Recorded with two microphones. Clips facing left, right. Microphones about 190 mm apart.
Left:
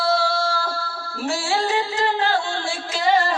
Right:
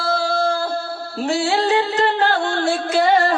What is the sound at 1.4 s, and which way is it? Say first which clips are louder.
Music: right 5 dB; 60° right (ahead or behind).